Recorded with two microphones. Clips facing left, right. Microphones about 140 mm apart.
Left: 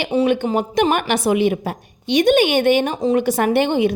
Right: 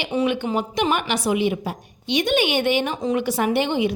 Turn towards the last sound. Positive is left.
turn(degrees=50)  # may be behind; listen again after turning